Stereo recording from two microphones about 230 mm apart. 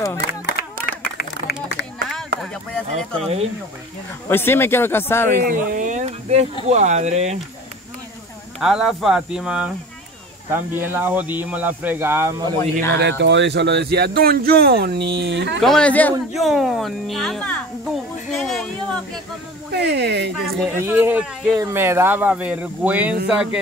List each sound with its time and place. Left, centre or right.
0.3 s clapping: left
2.7 s speech: centre
4.3 s speech: centre
5.4 s speech: right
8.5 s speech: centre
13.2 s speech: right
15.6 s speech: centre
19.7 s speech: right
20.4 s speech: centre
20.8 s speech: centre